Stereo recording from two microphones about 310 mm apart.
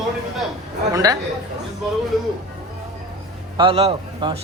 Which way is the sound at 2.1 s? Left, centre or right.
Centre.